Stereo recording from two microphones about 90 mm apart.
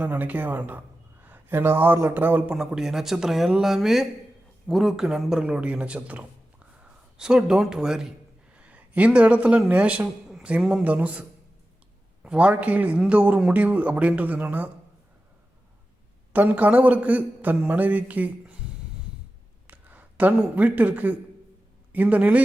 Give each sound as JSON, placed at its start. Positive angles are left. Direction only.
{"t": 0.0, "sound": "speech", "side_deg": -20}
{"t": 2.6, "sound": "a man's voice", "side_deg": -5}
{"t": 8.5, "sound": "a sound", "side_deg": -15}
{"t": 9.6, "sound": "a man's voice", "side_deg": -15}
{"t": 16.3, "sound": "a man's voice", "side_deg": -20}
{"t": 19.6, "sound": "a man's voice", "side_deg": -20}